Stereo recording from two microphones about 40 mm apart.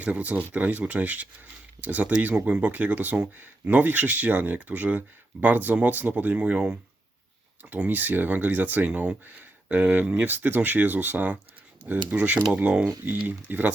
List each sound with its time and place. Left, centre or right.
0.0 s speech: right
2.7 s speech: right
7.9 s speech: right
8.9 s speech: right
9.6 s speech: right
10.2 s speech: right
12.7 s speech: right